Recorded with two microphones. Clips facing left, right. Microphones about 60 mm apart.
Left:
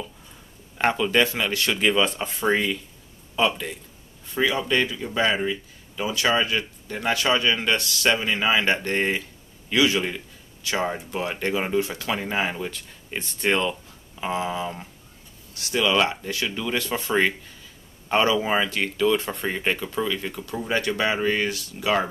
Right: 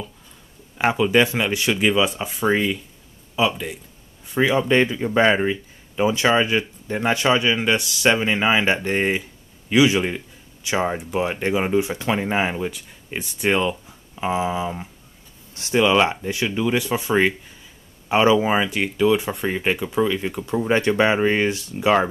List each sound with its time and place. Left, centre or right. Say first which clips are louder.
0.7 s a man's voice: right 3 dB; centre
4.4 s a man's voice: right 5 dB; right
15.5 s a man's voice: right 5 dB; right